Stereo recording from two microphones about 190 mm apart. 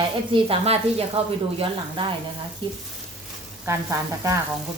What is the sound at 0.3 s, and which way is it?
Speech, 30° right (ahead or behind).